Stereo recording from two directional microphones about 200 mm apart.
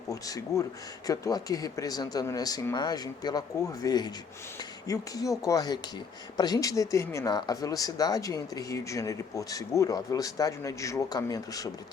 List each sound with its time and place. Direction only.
0.1 s speech: 15° left (ahead or behind)